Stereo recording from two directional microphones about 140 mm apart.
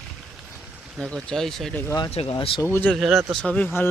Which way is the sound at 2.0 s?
45° left (ahead or behind).